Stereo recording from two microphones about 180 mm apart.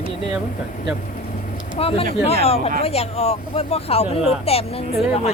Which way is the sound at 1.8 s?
30° left (ahead or behind).